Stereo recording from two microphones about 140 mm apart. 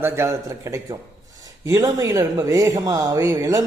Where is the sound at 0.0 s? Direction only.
20° right (ahead or behind).